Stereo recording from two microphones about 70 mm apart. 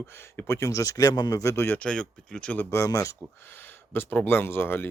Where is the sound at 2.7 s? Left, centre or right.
Left.